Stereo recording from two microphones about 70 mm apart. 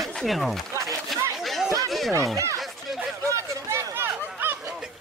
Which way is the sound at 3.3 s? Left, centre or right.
Right.